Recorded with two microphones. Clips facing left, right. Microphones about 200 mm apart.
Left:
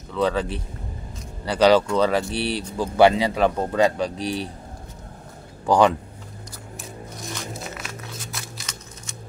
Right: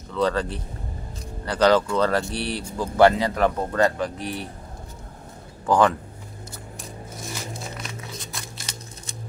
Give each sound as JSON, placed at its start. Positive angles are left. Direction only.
{"t": 0.1, "sound": "speech", "side_deg": 5}
{"t": 1.5, "sound": "speech", "side_deg": 10}
{"t": 2.3, "sound": "speech", "side_deg": 65}
{"t": 3.0, "sound": "speech", "side_deg": 10}
{"t": 4.2, "sound": "a man's voice", "side_deg": 90}
{"t": 5.7, "sound": "speech", "side_deg": 15}
{"t": 7.3, "sound": "music", "side_deg": 0}
{"t": 8.7, "sound": "a sound", "side_deg": -35}